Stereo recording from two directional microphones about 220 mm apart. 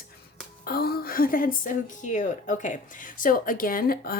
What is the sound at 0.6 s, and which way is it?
A woman's voice, 45° left (ahead or behind).